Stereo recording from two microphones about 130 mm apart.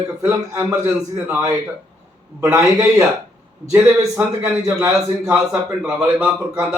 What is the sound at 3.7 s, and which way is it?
A man's voice, 15° right (ahead or behind).